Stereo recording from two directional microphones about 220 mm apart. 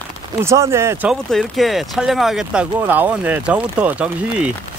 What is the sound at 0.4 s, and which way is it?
Speech, 10° right (ahead or behind).